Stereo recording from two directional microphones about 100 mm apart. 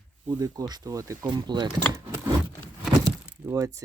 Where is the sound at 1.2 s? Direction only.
45° right (ahead or behind).